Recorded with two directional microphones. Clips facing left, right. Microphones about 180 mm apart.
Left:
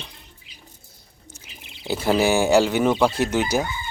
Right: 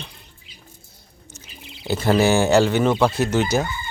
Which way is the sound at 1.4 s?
10° left (ahead or behind).